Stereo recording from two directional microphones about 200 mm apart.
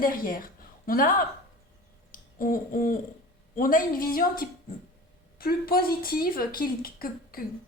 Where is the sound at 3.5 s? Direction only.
45° left (ahead or behind).